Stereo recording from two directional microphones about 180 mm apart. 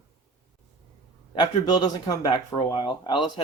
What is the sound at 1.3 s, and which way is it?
Speech, 25° left (ahead or behind).